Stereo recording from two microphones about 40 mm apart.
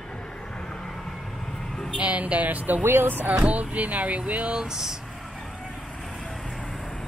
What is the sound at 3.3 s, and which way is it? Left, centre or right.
Speech, right.